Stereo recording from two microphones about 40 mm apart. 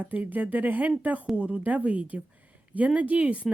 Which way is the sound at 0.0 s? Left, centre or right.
Right.